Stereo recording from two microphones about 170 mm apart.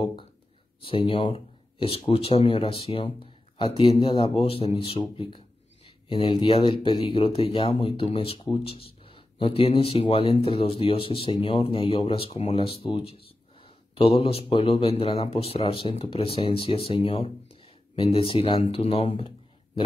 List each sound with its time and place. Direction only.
0.8 s speech: 30° left (ahead or behind)